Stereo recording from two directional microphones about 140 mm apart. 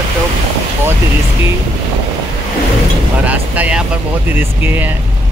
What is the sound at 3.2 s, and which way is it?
Speech, 10° right (ahead or behind).